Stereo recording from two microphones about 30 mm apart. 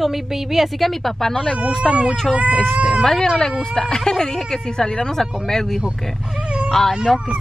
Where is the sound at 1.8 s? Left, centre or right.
Right.